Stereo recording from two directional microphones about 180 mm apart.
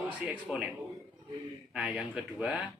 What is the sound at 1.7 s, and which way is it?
Speech, 5° right (ahead or behind).